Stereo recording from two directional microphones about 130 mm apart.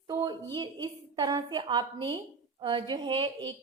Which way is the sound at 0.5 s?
35° right (ahead or behind).